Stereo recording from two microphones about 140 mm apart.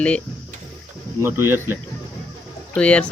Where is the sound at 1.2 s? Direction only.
15° right (ahead or behind).